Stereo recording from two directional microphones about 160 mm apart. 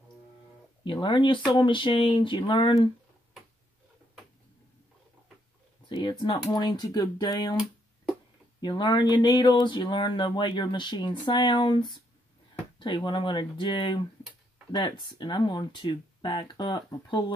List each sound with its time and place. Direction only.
0.8 s speech: 30° left (ahead or behind)
5.9 s speech: 30° left (ahead or behind)
8.5 s speech: 30° left (ahead or behind)